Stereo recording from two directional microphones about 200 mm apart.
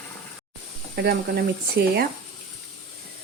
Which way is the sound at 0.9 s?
50° right (ahead or behind).